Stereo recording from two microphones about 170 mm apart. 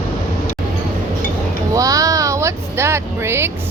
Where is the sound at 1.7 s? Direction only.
20° right (ahead or behind).